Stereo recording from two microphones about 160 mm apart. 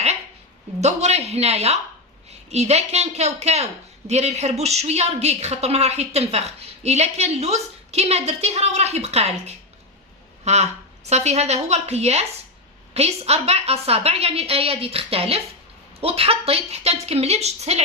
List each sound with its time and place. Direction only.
0.8 s a woman's voice: 45° right (ahead or behind)